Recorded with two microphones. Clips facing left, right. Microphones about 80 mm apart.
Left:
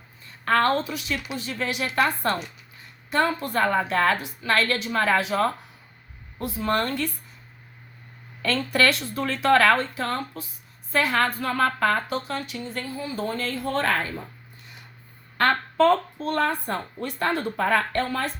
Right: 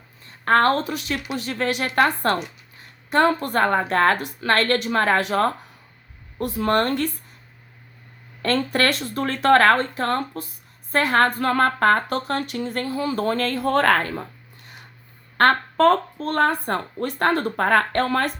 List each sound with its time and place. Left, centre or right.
0.3 s speech: right
8.4 s a woman's voice: right
15.4 s speech: right